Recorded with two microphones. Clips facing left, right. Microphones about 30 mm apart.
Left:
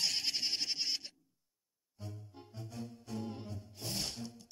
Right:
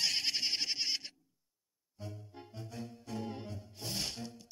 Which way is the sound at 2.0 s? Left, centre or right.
Right.